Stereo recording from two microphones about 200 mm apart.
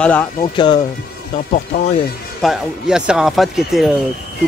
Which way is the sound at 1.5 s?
35° left (ahead or behind).